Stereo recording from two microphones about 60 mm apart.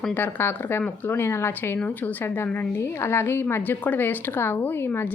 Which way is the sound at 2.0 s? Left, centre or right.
Left.